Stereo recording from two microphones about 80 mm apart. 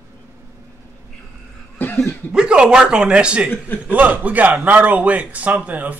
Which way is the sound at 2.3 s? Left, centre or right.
Centre.